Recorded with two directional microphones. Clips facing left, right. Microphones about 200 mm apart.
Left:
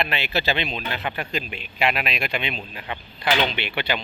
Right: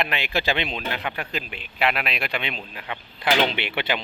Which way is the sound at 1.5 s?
10° left (ahead or behind).